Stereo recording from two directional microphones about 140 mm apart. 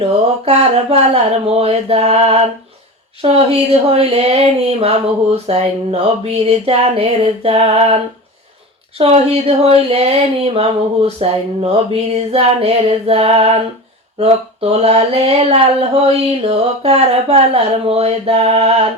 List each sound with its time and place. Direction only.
0.4 s speech: 45° right (ahead or behind)